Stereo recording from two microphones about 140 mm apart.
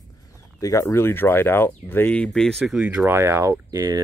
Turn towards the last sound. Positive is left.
turn(degrees=-25)  # may be behind; listen again after turning